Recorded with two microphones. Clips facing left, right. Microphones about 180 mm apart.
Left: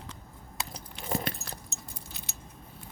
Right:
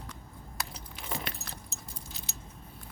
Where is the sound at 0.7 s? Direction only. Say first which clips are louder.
Left 6 dB; 40° left (ahead or behind).